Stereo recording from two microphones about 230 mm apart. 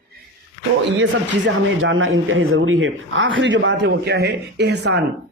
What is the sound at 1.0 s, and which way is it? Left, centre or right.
Speech, right.